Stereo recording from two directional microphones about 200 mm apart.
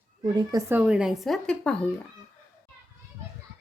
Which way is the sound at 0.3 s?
20° right (ahead or behind).